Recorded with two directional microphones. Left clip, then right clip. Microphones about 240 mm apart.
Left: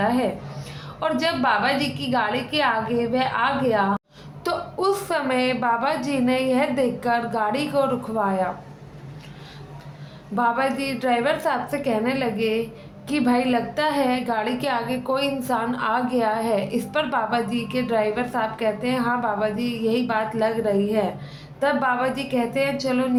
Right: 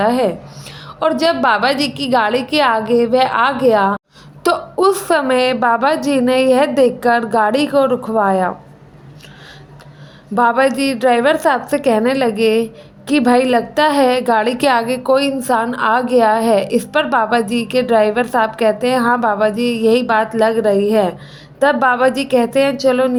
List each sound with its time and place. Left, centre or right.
0.0 s a sound: right
0.9 s a woman's voice: right
10.3 s a woman's voice: right